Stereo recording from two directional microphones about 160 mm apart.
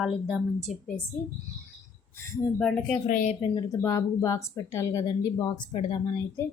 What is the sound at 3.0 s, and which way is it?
Speech, 55° left (ahead or behind).